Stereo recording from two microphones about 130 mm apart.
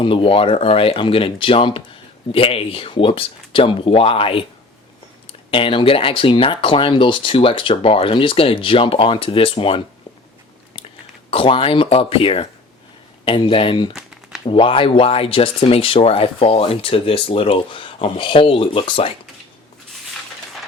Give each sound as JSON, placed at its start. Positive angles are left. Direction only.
{"t": 0.0, "sound": "speech", "side_deg": 40}